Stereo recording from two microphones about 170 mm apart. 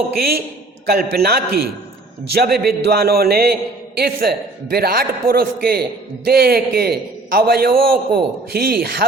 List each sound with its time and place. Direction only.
0.2 s a man's voice: 65° right (ahead or behind)